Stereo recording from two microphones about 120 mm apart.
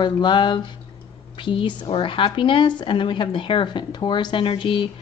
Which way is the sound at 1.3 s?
45° left (ahead or behind).